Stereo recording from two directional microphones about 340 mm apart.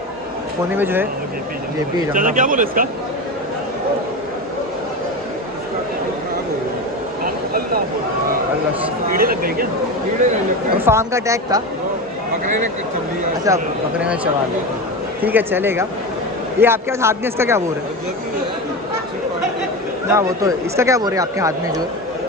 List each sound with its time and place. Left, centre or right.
0.7 s speech: centre
2.1 s speech: right
7.2 s a sound: right
9.1 s speech: right
10.9 s speech: centre
13.5 s a man's voice: centre
20.1 s speech: centre